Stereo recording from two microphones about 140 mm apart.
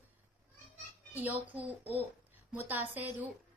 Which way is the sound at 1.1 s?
10° right (ahead or behind).